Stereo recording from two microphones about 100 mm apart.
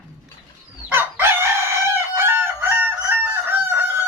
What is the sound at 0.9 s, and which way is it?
Chicken, 20° right (ahead or behind).